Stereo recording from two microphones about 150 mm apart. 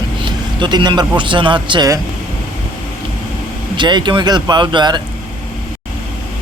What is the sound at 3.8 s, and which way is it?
Speech, 30° right (ahead or behind).